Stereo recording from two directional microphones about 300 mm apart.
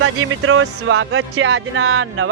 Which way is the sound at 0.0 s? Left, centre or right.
Right.